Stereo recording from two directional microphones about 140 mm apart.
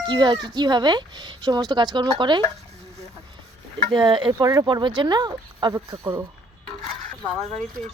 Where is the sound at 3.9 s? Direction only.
35° right (ahead or behind).